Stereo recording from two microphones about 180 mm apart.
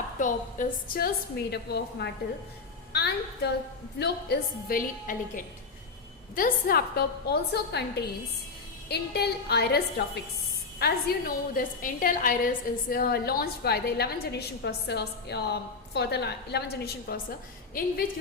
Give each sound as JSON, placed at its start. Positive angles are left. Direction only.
{"t": 0.2, "sound": "a woman's voice", "side_deg": 45}